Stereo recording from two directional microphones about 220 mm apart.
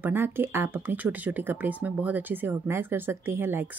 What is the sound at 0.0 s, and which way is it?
Speech, 10° right (ahead or behind).